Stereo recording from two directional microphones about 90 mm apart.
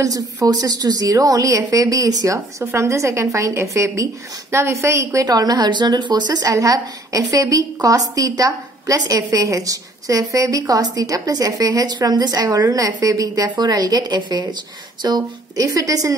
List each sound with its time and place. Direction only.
0.0 s a woman's voice: 40° right (ahead or behind)